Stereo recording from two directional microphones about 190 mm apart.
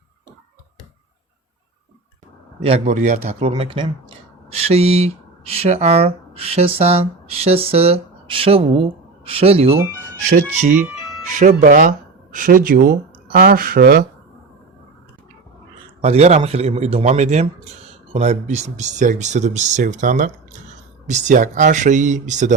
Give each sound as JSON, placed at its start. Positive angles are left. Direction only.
{"t": 2.6, "sound": "speech", "side_deg": -35}
{"t": 16.0, "sound": "speech", "side_deg": -35}